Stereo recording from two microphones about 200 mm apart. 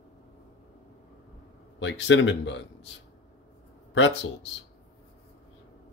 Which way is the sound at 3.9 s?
65° left (ahead or behind).